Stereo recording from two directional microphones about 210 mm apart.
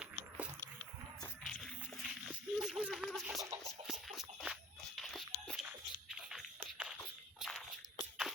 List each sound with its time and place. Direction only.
1.5 s a sound: centre (ahead or behind)
4.9 s dog: centre (ahead or behind)
7.3 s walk: centre (ahead or behind)